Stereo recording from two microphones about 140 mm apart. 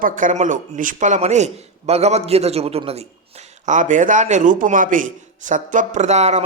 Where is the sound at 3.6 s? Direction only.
65° right (ahead or behind).